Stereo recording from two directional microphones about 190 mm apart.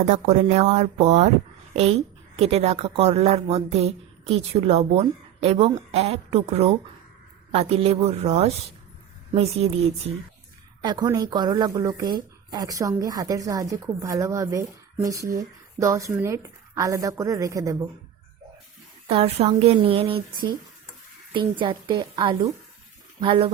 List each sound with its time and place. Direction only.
0.1 s a woman's voice: 35° right (ahead or behind)
9.6 s a woman's voice: 30° right (ahead or behind)
19.0 s speech: 30° right (ahead or behind)